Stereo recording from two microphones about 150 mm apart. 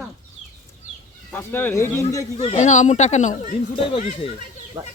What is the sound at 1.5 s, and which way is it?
Speech, 15° left (ahead or behind).